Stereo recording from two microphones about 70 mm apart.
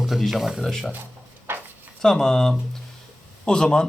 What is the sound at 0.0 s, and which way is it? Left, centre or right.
Speech, centre.